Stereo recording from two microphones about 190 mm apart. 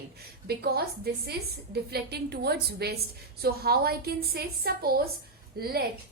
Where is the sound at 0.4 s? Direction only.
55° right (ahead or behind).